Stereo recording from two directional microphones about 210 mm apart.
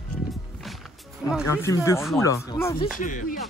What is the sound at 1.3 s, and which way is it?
Speech, 5° right (ahead or behind).